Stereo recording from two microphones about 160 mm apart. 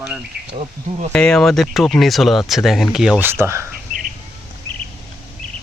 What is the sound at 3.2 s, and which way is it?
Speech, 15° right (ahead or behind).